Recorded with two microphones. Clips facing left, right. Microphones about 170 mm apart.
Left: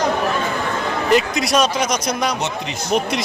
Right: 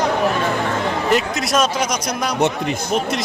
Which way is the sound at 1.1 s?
Centre (ahead or behind).